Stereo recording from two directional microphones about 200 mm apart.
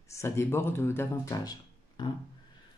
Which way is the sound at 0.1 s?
15° left (ahead or behind).